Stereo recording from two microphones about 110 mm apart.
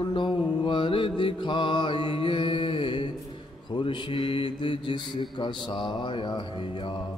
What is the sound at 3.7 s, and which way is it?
Speech, 45° left (ahead or behind).